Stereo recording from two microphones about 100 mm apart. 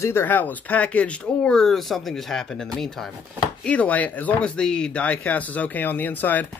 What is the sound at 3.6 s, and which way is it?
Speech, 15° left (ahead or behind).